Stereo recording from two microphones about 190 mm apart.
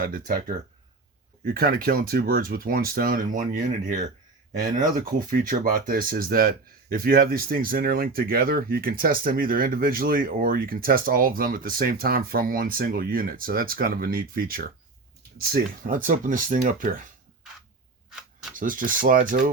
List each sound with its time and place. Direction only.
0.0 s speech: 50° right (ahead or behind)
18.5 s speech: 45° right (ahead or behind)